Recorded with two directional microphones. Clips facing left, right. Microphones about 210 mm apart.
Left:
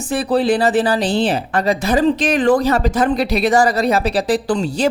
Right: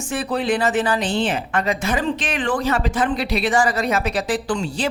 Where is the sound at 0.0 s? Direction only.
35° left (ahead or behind).